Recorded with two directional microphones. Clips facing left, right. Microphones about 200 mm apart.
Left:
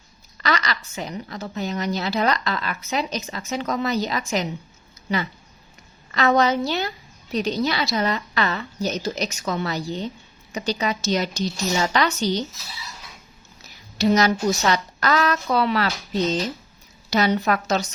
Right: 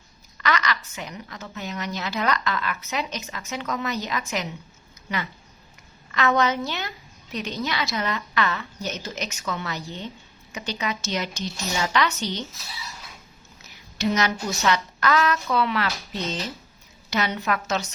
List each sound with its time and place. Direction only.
0.4 s a woman's voice: 35° left (ahead or behind)
6.1 s a woman's voice: 35° left (ahead or behind)
14.0 s a woman's voice: 35° left (ahead or behind)
17.1 s a woman's voice: 35° left (ahead or behind)